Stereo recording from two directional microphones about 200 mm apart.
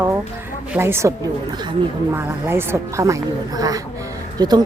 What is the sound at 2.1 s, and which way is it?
A woman's voice, 10° right (ahead or behind).